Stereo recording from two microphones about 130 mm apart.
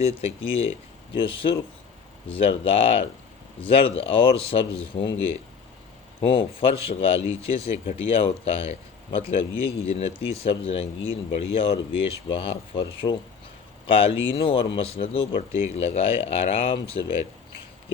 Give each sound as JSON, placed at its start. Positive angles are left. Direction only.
{"t": 0.0, "sound": "speech", "side_deg": 50}
{"t": 6.2, "sound": "speech", "side_deg": 45}